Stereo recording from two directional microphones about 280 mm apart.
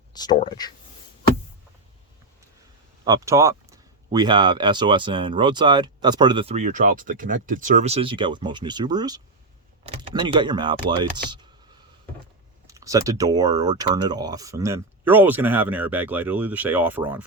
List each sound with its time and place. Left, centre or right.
0.1 s a sound: centre
0.3 s speech: centre
3.0 s speech: centre
12.6 s speech: centre